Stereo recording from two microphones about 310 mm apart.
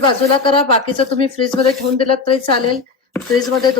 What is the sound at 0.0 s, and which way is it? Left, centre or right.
A woman's voice, centre.